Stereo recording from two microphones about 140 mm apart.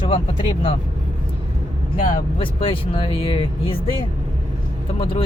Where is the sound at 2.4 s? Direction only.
40° left (ahead or behind).